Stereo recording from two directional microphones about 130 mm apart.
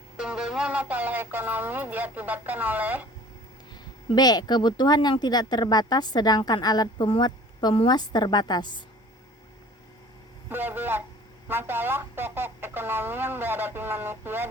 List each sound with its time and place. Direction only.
0.2 s speech: 5° right (ahead or behind)
4.1 s speech: 30° left (ahead or behind)
10.5 s speech: 15° right (ahead or behind)